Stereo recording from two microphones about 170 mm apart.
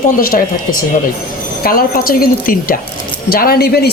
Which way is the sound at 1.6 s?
60° left (ahead or behind).